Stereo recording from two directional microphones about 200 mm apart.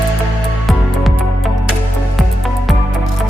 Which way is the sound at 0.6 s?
Centre (ahead or behind).